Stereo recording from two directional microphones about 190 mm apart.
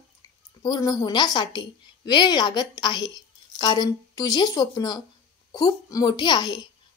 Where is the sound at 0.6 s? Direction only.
20° left (ahead or behind).